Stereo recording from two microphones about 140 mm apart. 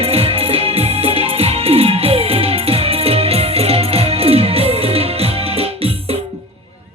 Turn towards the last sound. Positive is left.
turn(degrees=-45)  # may be behind; listen again after turning